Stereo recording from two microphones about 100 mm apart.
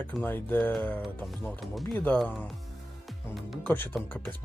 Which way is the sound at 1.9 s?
20° left (ahead or behind).